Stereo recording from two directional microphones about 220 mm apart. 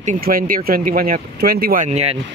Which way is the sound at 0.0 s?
35° right (ahead or behind).